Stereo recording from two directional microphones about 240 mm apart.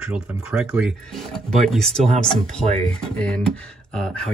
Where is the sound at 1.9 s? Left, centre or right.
Right.